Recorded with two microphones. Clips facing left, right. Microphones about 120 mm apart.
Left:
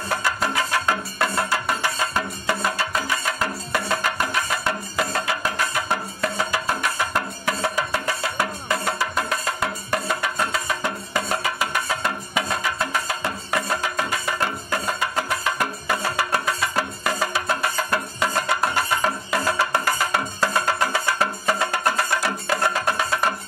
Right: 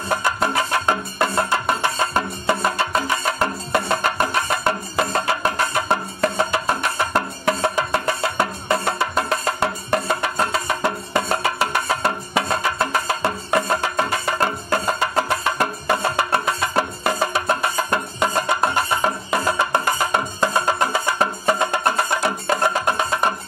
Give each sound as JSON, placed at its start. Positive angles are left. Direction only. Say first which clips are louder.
{"t": 0.1, "sound": "music", "louder": "right 4 dB", "side_deg": -20}
{"t": 10.7, "sound": "music", "louder": "right 4 dB", "side_deg": -60}
{"t": 11.6, "sound": "music", "louder": "right 4 dB", "side_deg": -30}